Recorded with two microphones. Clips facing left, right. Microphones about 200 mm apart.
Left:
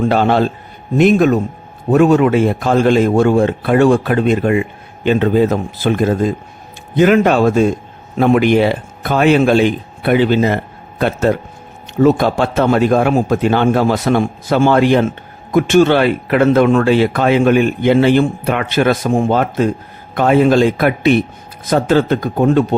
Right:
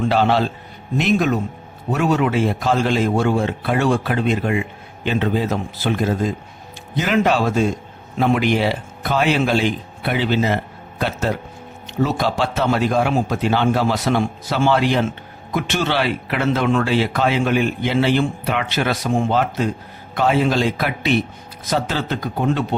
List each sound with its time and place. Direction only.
0.0 s a man's voice: 50° left (ahead or behind)